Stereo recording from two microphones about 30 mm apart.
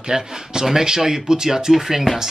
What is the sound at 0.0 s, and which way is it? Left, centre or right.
Speech, right.